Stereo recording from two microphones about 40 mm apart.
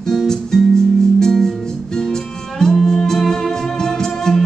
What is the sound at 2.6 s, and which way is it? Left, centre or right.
Music, centre.